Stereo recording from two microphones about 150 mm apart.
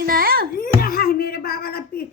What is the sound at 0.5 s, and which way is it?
Speech, 75° left (ahead or behind).